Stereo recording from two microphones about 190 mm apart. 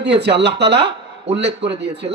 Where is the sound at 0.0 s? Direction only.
65° right (ahead or behind).